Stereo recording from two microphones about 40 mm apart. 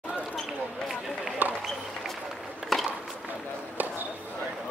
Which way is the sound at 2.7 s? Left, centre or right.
Centre.